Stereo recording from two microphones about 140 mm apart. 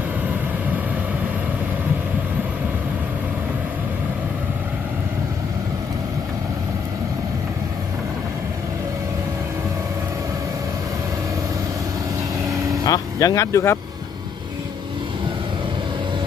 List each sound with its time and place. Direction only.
12.8 s speech: 25° left (ahead or behind)